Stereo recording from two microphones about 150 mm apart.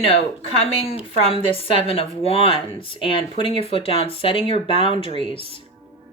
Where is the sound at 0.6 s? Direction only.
40° left (ahead or behind).